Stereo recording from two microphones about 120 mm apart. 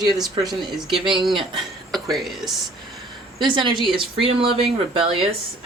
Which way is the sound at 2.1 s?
Centre (ahead or behind).